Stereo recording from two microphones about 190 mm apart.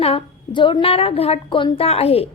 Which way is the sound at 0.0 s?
30° left (ahead or behind).